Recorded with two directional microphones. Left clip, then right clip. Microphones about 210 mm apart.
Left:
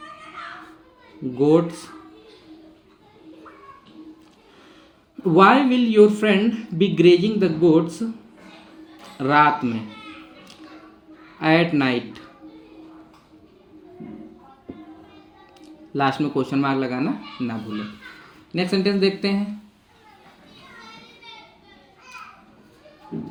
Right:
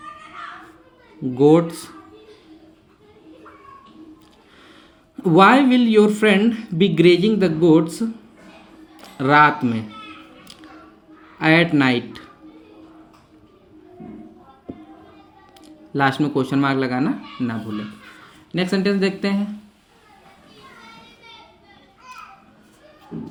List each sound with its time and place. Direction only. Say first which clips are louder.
1.4 s speech: right 3 dB; 45° right (ahead or behind)
5.1 s speech: right 2 dB; 50° right (ahead or behind)
11.3 s speech: right 3 dB; 45° right (ahead or behind)
15.6 s speech: right 2 dB; 45° right (ahead or behind)